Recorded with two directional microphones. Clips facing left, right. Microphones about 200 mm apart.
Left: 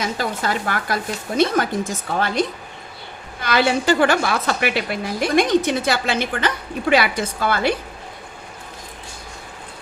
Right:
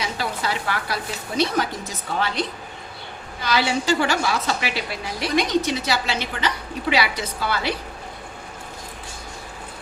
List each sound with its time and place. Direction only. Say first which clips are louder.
0.0 s a woman's voice: left 3 dB; 50° left (ahead or behind)